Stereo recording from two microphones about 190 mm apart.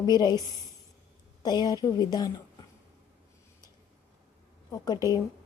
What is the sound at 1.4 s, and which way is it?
A woman's voice, 20° left (ahead or behind).